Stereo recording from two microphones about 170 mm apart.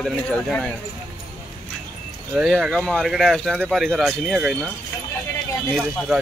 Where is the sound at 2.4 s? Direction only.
5° right (ahead or behind).